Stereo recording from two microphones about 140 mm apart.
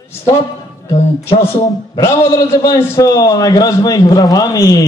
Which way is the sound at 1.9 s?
20° left (ahead or behind).